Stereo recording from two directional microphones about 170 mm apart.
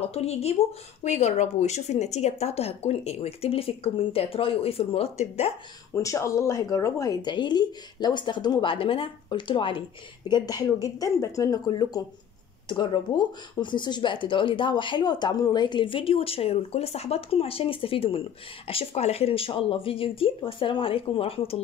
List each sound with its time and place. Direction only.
0.0 s speech: 35° left (ahead or behind)
5.9 s speech: 15° left (ahead or behind); by 21.5 s 35° left (ahead or behind)